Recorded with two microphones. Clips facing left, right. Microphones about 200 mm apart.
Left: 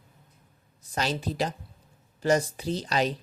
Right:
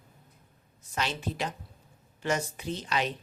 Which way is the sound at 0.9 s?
35° left (ahead or behind).